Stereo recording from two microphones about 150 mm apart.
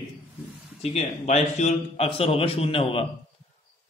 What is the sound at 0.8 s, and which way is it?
A man's voice, 45° left (ahead or behind).